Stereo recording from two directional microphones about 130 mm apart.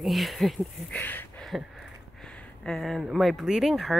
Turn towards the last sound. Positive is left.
turn(degrees=0)  # may be behind; listen again after turning